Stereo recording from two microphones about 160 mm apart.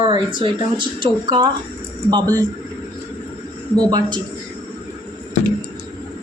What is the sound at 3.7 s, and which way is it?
Speech, 25° right (ahead or behind).